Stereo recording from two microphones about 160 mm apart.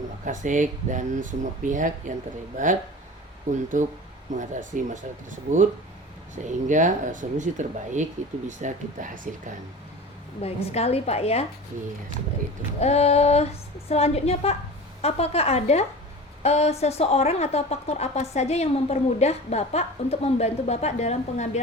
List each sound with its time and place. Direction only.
0.3 s speech: 55° right (ahead or behind)
3.7 s speech: 55° right (ahead or behind)
10.4 s a woman's voice: 40° left (ahead or behind)
12.8 s a woman's voice: 40° left (ahead or behind)